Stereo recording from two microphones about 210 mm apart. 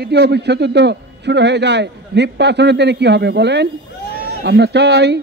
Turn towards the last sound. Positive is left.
turn(degrees=-55)  # may be behind; listen again after turning